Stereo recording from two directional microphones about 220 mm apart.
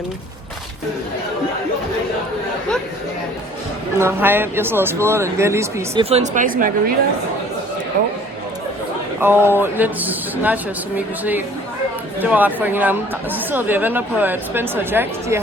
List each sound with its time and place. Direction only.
3.9 s speech: 10° right (ahead or behind)
5.9 s speech: 25° right (ahead or behind)
9.2 s speech: 10° right (ahead or behind)